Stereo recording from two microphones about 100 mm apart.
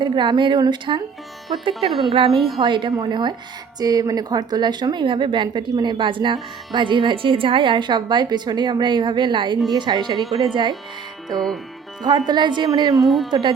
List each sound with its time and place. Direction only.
0.0 s a woman's voice: 50° right (ahead or behind)
11.3 s speech: centre (ahead or behind)
12.0 s a woman's voice: 45° right (ahead or behind)
13.0 s speech: centre (ahead or behind)